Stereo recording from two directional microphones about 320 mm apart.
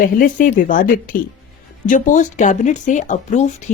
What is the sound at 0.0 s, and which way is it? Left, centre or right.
Speech, left.